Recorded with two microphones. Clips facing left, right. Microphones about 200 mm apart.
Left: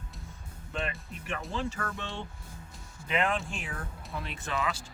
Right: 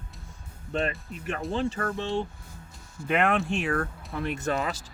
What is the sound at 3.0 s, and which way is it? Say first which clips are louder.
Speech: right 5 dB; 60° right (ahead or behind).